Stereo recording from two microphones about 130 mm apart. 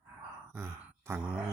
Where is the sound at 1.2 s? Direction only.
10° right (ahead or behind).